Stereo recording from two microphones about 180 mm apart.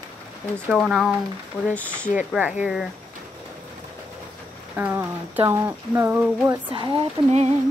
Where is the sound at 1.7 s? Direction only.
10° left (ahead or behind).